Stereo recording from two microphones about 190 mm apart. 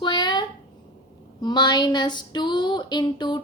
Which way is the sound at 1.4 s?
20° left (ahead or behind).